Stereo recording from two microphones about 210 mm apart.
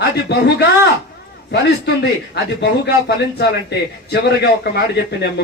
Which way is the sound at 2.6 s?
55° left (ahead or behind).